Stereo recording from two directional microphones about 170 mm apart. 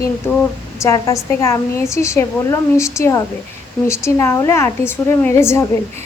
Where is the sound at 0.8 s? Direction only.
20° left (ahead or behind).